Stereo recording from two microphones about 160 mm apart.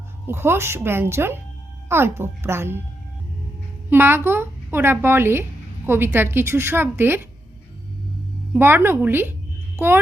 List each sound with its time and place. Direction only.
0.3 s speech: 15° right (ahead or behind)
3.8 s speech: 15° right (ahead or behind)
8.5 s speech: 15° right (ahead or behind)